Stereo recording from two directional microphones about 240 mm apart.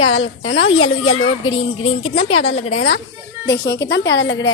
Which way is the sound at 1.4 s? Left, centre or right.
Left.